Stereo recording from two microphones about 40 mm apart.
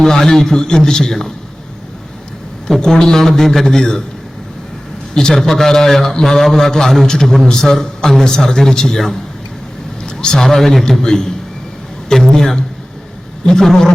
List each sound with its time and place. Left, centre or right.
0.0 s a man's voice: centre
2.8 s a man's voice: centre
5.1 s a man's voice: centre
10.0 s a man's voice: centre